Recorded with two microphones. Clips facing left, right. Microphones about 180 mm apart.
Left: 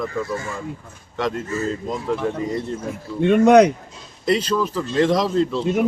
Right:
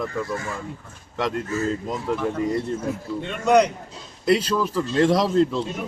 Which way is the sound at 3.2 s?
75° left (ahead or behind).